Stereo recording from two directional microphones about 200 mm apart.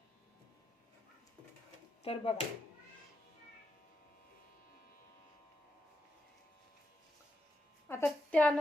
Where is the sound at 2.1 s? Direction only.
30° left (ahead or behind).